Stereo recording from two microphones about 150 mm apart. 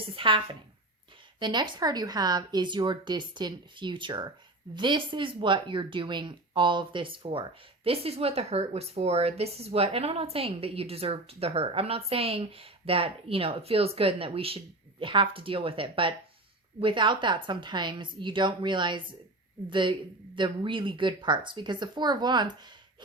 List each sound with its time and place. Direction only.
0.2 s speech: 35° right (ahead or behind)